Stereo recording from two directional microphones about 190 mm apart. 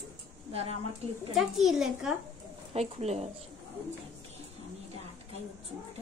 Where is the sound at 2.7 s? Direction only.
35° right (ahead or behind).